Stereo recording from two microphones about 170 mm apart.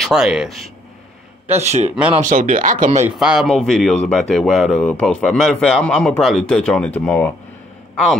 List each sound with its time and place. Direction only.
0.0 s speech: 5° right (ahead or behind)
1.6 s speech: 40° right (ahead or behind)
3.2 s speech: 5° right (ahead or behind)